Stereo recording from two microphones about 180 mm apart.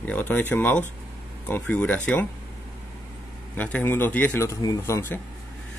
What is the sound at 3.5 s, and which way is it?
Speech, 10° left (ahead or behind).